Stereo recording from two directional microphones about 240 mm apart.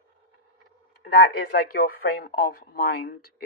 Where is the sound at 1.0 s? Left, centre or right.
Left.